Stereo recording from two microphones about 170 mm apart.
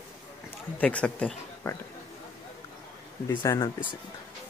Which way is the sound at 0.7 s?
5° left (ahead or behind).